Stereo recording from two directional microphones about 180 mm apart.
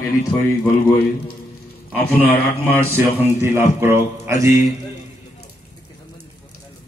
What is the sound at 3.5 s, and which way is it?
A man's voice, 15° right (ahead or behind).